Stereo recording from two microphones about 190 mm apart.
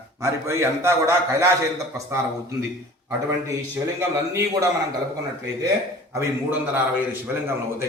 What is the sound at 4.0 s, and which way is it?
Speech, 15° right (ahead or behind).